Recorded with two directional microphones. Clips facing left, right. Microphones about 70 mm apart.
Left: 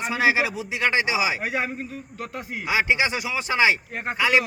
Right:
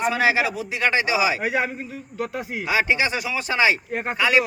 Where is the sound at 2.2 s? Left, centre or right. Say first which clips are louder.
Right 6 dB; centre.